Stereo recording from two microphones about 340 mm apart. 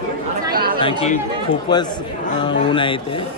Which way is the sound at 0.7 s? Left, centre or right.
Centre.